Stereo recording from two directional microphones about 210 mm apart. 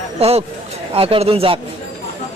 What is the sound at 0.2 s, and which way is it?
A man's voice, 30° right (ahead or behind).